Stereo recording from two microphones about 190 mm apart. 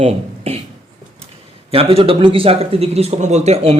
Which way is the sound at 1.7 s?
30° right (ahead or behind).